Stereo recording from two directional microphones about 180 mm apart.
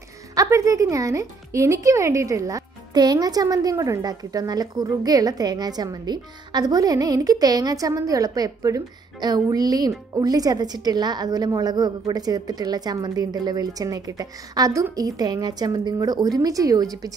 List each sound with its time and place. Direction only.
0.3 s speech: 20° right (ahead or behind)